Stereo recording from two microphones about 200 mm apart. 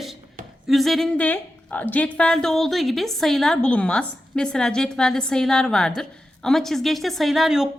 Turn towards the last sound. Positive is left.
turn(degrees=0)  # may be behind; listen again after turning